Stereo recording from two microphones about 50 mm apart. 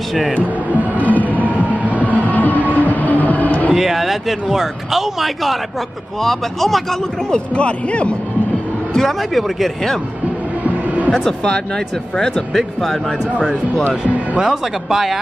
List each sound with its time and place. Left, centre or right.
0.9 s music: left
3.7 s a man's voice: centre
7.2 s speech: centre
8.9 s a man's voice: centre
11.4 s a man's voice: centre
14.4 s speech: centre